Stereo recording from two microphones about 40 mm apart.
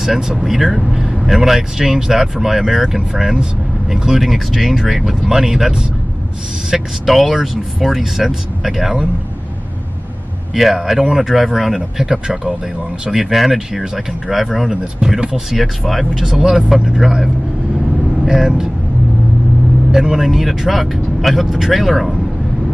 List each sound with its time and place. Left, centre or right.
0.5 s speech: centre
10.5 s speech: centre
12.1 s speech: centre
14.7 s speech: centre
15.1 s speech: right
15.5 s speech: centre
19.9 s speech: centre